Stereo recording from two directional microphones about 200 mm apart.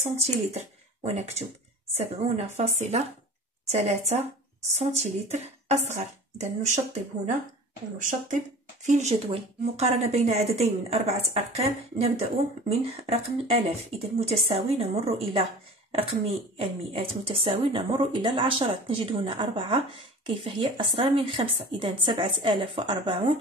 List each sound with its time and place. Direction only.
0.2 s speech: 30° right (ahead or behind)
8.0 s speech: 40° right (ahead or behind); by 23.3 s 25° right (ahead or behind)